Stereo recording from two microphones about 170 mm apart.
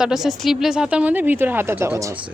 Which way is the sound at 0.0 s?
Centre (ahead or behind).